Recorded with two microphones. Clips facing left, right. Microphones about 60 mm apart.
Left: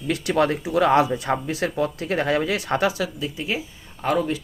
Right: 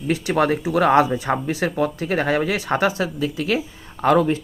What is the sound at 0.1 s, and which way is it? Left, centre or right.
Speech, right.